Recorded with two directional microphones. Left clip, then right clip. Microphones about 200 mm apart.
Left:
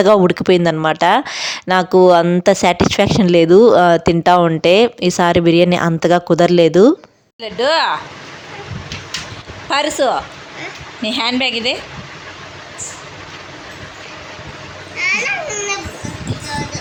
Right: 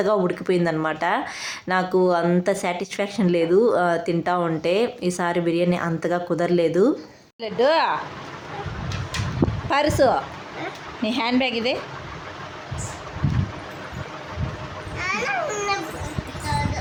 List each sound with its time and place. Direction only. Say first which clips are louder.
0.0 s speech: left 10 dB; 45° left (ahead or behind)
7.4 s a woman's voice: left 4 dB; centre (ahead or behind)
9.6 s a woman's voice: left 4 dB; centre (ahead or behind)
15.1 s a sound: left 3 dB; 20° right (ahead or behind)